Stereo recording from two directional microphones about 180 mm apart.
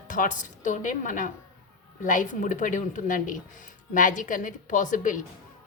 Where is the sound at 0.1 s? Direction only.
50° left (ahead or behind).